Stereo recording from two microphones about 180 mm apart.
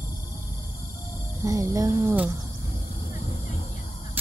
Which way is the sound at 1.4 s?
20° right (ahead or behind).